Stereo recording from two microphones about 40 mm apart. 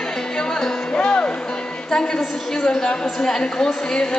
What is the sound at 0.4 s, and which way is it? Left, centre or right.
Music, centre.